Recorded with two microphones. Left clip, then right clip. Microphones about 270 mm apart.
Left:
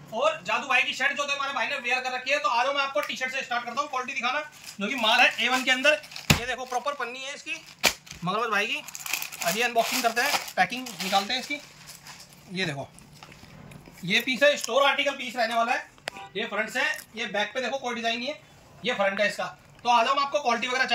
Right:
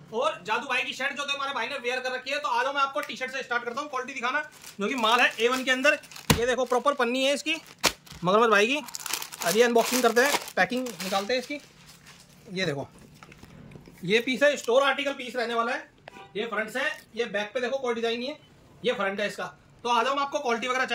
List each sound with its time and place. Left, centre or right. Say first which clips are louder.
0.5 s a man's voice: left 3 dB; centre
6.4 s speech: right 5 dB; right
10.3 s chopping: even; right
11.3 s a man's voice: right 2 dB; centre
12.5 s a man's voice: right 1 dB; centre
14.0 s a man's voice: left 1 dB; centre